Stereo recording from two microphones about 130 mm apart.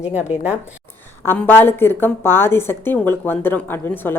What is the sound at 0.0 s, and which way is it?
Speech, 10° right (ahead or behind).